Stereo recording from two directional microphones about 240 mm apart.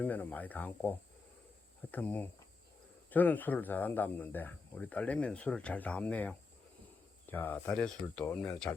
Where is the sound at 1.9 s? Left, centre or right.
Centre.